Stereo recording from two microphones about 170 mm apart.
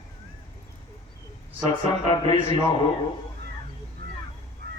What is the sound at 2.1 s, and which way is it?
Speech, 30° left (ahead or behind).